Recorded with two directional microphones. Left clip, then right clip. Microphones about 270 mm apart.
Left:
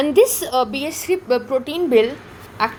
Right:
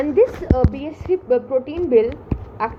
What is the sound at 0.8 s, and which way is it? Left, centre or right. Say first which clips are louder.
A woman's voice: left 1 dB; left.